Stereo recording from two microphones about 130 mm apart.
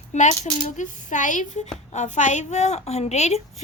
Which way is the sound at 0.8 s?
75° left (ahead or behind).